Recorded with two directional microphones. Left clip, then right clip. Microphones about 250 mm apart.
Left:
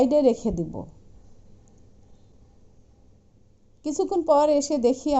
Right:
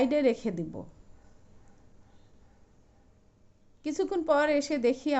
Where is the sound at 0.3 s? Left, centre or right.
Right.